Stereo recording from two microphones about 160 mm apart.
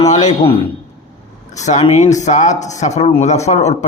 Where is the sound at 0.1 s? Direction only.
45° left (ahead or behind).